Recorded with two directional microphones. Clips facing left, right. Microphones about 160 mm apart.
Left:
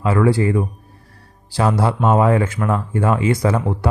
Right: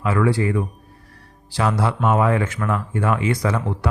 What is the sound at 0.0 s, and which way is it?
A man's voice, 30° left (ahead or behind).